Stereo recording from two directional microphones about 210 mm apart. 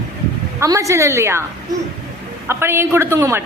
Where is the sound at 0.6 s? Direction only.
15° right (ahead or behind).